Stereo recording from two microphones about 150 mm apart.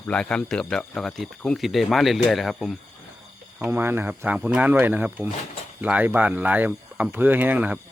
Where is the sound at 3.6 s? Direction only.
15° right (ahead or behind).